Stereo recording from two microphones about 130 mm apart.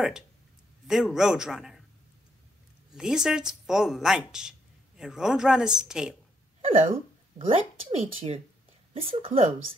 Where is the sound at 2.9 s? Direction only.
5° right (ahead or behind).